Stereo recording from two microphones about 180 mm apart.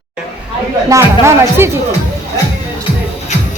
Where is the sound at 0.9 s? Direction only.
15° right (ahead or behind).